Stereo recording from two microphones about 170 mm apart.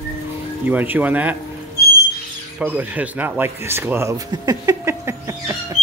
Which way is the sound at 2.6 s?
10° right (ahead or behind).